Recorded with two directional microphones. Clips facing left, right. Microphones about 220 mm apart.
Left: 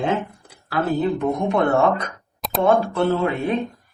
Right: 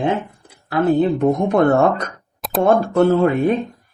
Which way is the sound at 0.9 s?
40° right (ahead or behind).